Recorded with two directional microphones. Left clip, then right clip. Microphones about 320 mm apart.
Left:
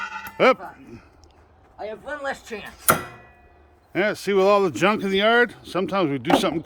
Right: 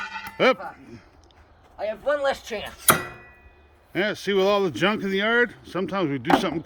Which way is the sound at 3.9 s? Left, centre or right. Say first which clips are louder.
Left 2 dB; centre.